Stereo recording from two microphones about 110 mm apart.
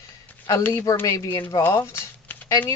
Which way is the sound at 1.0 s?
30° left (ahead or behind).